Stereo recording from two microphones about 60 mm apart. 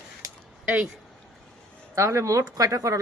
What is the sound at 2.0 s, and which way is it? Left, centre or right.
Speech, right.